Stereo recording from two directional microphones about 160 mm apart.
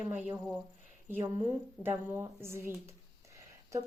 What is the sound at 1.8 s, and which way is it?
A woman's voice, 15° right (ahead or behind).